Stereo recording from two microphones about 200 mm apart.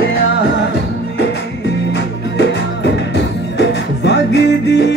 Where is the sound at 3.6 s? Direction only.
60° left (ahead or behind).